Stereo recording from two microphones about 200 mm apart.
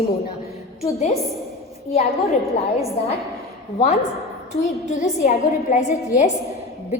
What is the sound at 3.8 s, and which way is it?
A woman's voice, 35° left (ahead or behind).